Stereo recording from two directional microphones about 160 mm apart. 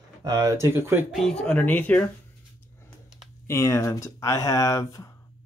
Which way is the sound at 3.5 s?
15° left (ahead or behind).